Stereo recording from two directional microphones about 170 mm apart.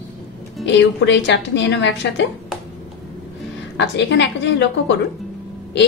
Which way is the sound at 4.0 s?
90° left.